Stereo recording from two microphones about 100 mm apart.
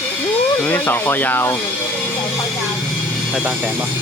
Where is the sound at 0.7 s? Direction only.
20° left (ahead or behind).